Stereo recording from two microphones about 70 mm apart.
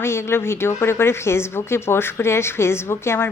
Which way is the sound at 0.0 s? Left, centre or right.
Left.